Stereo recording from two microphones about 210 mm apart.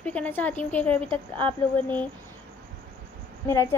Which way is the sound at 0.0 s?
5° left (ahead or behind).